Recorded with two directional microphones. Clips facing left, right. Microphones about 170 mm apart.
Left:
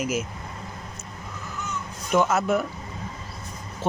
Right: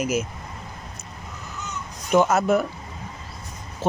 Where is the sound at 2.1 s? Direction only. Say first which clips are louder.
Right 3 dB; 40° right (ahead or behind).